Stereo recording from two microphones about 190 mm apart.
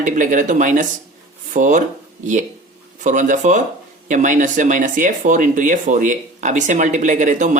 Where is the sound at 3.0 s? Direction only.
40° right (ahead or behind).